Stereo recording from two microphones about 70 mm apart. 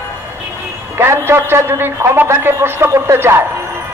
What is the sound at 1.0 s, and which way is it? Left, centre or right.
A man's voice, right.